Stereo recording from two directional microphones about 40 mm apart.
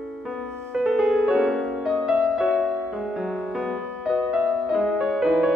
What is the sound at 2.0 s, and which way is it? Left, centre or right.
Music, centre.